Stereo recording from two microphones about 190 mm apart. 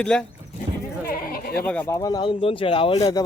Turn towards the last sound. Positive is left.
turn(degrees=30)  # may be behind; listen again after turning